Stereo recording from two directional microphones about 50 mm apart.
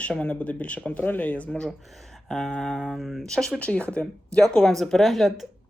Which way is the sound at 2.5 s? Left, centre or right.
Centre.